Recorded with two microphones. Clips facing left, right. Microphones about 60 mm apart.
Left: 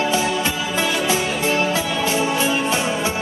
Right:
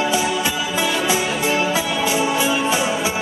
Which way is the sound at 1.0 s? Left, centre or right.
Centre.